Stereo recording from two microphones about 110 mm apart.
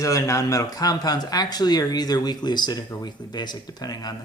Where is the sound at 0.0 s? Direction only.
30° left (ahead or behind).